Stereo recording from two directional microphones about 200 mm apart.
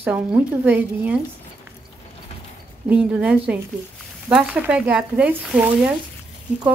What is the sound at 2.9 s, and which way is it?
A woman's voice, 5° right (ahead or behind).